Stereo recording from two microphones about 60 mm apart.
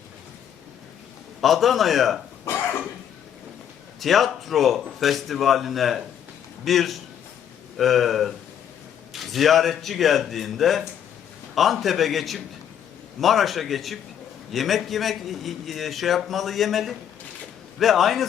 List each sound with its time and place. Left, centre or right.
1.4 s a man's voice: centre
2.5 s cough: left
4.0 s a man's voice: centre